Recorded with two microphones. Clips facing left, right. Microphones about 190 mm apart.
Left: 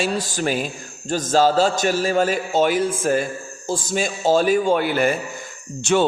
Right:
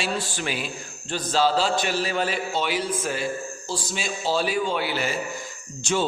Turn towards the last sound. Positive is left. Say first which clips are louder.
# left 7 dB
turn(degrees=65)  # may be behind; listen again after turning